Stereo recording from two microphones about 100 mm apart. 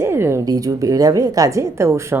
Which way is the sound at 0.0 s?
25° right (ahead or behind).